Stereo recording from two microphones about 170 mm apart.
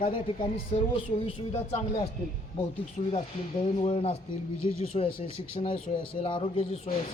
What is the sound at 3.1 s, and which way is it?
Speech, 35° left (ahead or behind).